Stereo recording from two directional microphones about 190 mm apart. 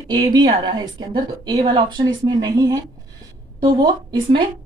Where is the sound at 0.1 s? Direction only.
20° right (ahead or behind).